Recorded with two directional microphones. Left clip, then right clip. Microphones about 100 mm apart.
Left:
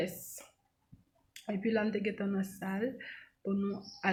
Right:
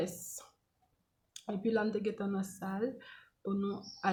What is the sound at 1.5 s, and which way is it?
Speech, 15° right (ahead or behind).